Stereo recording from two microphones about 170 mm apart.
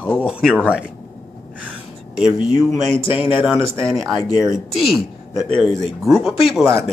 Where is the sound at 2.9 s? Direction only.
30° left (ahead or behind).